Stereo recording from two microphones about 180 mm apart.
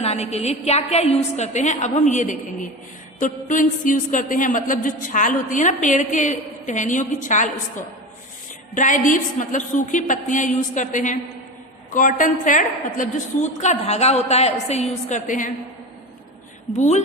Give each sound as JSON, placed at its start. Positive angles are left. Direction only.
{"t": 0.0, "sound": "a woman's voice", "side_deg": 35}
{"t": 8.7, "sound": "a woman's voice", "side_deg": 45}
{"t": 16.7, "sound": "a woman's voice", "side_deg": 40}